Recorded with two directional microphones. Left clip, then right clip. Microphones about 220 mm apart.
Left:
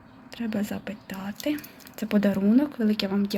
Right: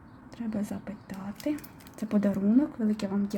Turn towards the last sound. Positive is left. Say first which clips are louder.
# left 5 dB
turn(degrees=0)  # may be behind; listen again after turning